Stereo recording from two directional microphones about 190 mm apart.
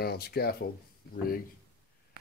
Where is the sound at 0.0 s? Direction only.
55° left (ahead or behind).